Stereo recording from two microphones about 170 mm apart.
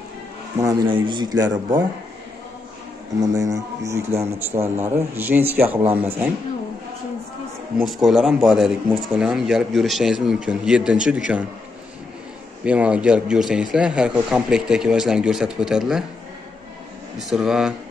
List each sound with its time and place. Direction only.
0.6 s speech: 25° right (ahead or behind)
3.2 s speech: 20° right (ahead or behind)
4.5 s speech: 40° right (ahead or behind)
4.8 s a man's voice: 15° right (ahead or behind)
7.8 s speech: centre (ahead or behind)
12.6 s speech: 5° right (ahead or behind)
17.2 s speech: 5° right (ahead or behind)